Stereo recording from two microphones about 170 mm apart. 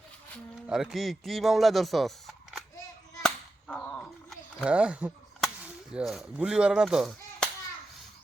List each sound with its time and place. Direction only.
0.7 s speech: 5° right (ahead or behind)
3.2 s whip: 10° left (ahead or behind)
4.6 s speech: 5° right (ahead or behind)